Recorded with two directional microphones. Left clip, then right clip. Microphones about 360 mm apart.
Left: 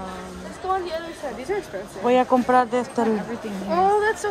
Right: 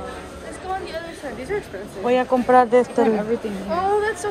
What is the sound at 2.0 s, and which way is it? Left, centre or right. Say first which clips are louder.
A woman's voice: even; centre.